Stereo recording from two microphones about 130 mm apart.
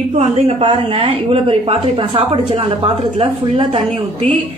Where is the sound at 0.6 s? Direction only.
45° right (ahead or behind).